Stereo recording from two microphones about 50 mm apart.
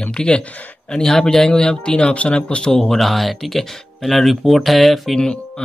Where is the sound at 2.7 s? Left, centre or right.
Centre.